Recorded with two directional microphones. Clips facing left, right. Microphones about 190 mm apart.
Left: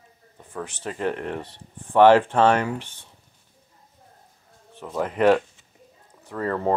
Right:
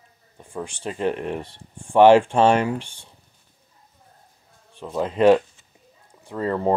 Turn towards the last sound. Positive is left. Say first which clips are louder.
# right 2 dB
turn(degrees=-15)  # may be behind; listen again after turning